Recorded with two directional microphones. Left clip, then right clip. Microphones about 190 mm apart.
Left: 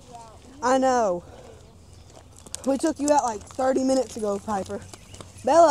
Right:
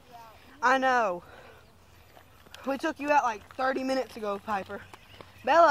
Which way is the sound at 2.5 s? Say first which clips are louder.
Left 7 dB; 20° right (ahead or behind).